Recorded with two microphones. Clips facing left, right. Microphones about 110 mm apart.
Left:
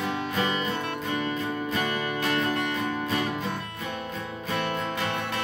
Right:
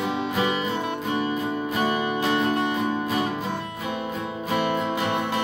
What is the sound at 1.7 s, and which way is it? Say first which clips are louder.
Music: right 7 dB; 20° right (ahead or behind).